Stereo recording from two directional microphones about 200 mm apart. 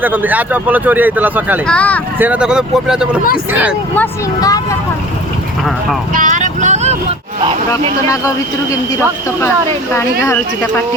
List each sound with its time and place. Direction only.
0.0 s speech: 10° right (ahead or behind)
1.6 s speech: 5° left (ahead or behind)
2.1 s speech: 10° right (ahead or behind)
3.9 s speech: 15° left (ahead or behind)
6.1 s vehicle: 40° right (ahead or behind)
8.0 s speech: 15° left (ahead or behind)